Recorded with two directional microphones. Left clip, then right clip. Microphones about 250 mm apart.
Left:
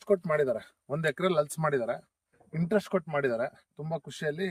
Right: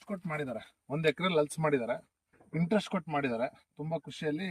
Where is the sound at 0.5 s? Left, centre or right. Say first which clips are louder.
Left 3 dB; centre.